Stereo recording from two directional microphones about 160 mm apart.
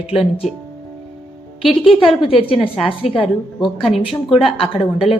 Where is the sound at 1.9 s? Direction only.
35° left (ahead or behind).